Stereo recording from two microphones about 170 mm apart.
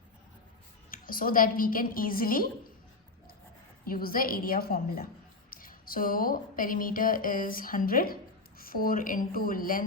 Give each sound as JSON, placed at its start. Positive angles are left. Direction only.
{"t": 0.9, "sound": "a woman's voice", "side_deg": 55}
{"t": 3.8, "sound": "a woman's voice", "side_deg": 60}